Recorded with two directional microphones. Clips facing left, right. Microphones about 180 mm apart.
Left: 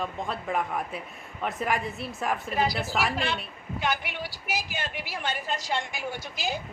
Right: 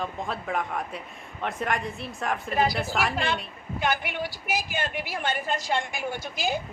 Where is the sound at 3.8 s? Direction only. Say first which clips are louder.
Right 3 dB; 50° right (ahead or behind).